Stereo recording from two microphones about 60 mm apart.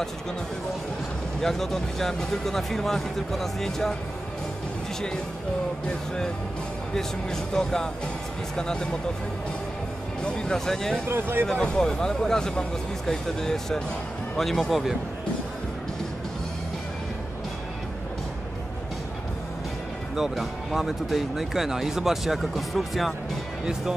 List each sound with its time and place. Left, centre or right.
1.4 s speech: centre
7.0 s speech: centre
10.2 s speech: centre
11.1 s speech: right
11.4 s speech: centre
20.2 s speech: centre